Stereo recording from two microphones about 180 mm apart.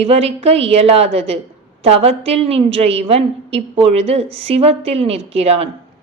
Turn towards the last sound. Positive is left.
turn(degrees=-35)  # may be behind; listen again after turning